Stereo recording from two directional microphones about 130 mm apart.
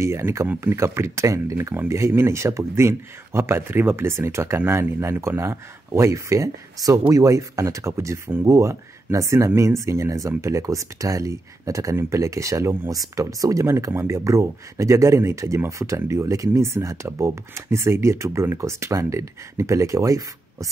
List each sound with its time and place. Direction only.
0.0 s speech: 20° right (ahead or behind)